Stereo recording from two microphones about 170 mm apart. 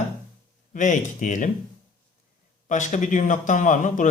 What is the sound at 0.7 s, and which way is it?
Speech, 50° left (ahead or behind).